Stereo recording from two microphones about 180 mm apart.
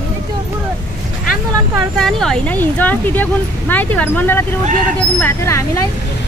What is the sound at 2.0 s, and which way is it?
Speech, centre (ahead or behind).